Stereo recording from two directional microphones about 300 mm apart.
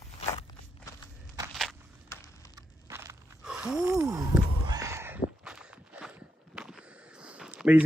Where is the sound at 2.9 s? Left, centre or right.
Centre.